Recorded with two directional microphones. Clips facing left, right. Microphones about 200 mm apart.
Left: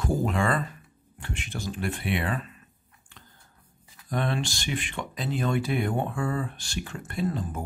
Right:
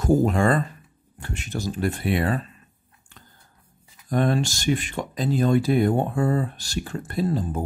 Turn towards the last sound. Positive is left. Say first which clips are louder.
# right 5 dB
turn(degrees=-35)  # may be behind; listen again after turning